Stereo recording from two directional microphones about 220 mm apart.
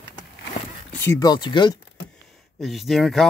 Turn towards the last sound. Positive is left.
turn(degrees=0)  # may be behind; listen again after turning